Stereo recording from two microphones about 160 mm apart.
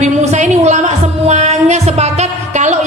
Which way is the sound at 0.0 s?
45° right (ahead or behind).